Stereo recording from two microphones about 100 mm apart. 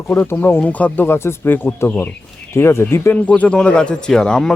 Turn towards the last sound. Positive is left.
turn(degrees=10)  # may be behind; listen again after turning